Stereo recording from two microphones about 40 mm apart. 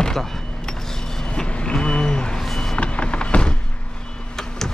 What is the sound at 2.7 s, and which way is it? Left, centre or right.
Vehicle, left.